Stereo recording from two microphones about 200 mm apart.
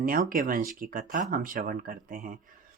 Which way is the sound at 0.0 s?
45° right (ahead or behind).